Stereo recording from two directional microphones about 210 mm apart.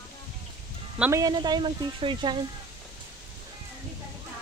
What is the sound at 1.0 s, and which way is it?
Speech, 15° right (ahead or behind).